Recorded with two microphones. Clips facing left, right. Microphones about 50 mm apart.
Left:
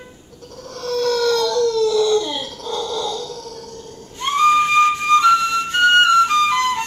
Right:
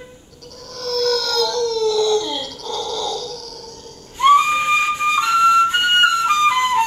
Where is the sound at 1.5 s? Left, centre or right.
Centre.